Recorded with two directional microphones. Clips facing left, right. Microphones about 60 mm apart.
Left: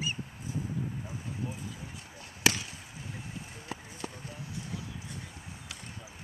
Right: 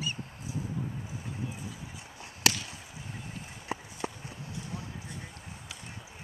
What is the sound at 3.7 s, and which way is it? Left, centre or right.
Run, right.